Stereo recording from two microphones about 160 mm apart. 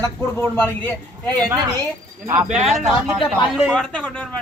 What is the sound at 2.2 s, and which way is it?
Speech, 20° right (ahead or behind).